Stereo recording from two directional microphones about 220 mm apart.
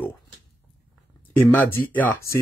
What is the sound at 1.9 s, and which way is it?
Speech, 10° left (ahead or behind).